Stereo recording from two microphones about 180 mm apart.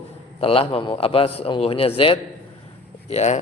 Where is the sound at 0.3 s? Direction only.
30° left (ahead or behind).